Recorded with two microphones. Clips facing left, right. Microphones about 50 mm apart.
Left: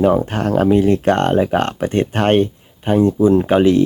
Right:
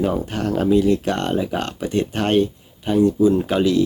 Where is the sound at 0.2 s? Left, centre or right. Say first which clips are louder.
Left 5 dB; left.